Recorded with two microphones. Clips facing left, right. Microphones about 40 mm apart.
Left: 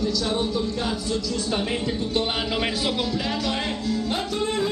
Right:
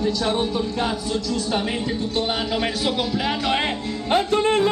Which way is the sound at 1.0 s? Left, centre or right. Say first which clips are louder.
Right 2 dB; centre.